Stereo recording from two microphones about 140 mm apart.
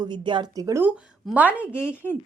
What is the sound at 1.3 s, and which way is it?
Speech, 10° right (ahead or behind).